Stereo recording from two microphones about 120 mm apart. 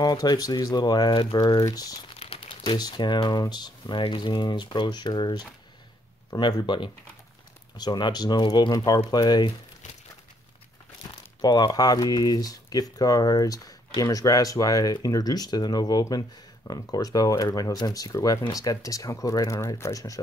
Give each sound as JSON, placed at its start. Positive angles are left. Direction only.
{"t": 0.0, "sound": "speech", "side_deg": 35}
{"t": 2.1, "sound": "crumpling", "side_deg": 50}
{"t": 2.5, "sound": "speech", "side_deg": 45}
{"t": 11.4, "sound": "speech", "side_deg": 35}